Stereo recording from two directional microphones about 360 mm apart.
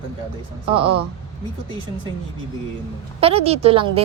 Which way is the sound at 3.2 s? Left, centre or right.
Centre.